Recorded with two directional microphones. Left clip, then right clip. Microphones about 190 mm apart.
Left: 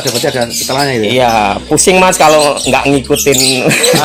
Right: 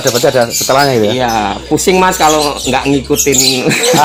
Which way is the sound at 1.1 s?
35° left (ahead or behind).